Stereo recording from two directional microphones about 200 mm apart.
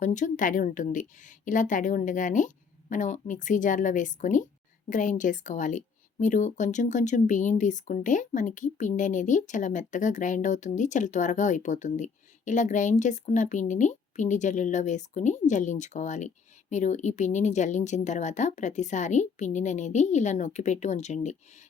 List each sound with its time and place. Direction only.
0.0 s a woman's voice: 40° left (ahead or behind)